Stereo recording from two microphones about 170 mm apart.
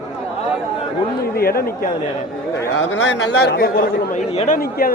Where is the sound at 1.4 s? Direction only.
60° left (ahead or behind).